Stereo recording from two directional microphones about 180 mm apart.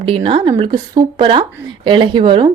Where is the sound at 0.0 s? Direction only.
30° right (ahead or behind).